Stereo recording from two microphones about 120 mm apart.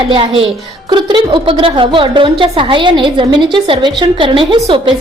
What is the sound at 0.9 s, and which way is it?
A woman's voice, 40° right (ahead or behind).